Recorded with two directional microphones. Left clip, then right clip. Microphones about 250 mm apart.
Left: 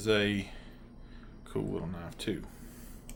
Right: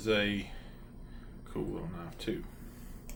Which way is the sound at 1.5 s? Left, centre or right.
Left.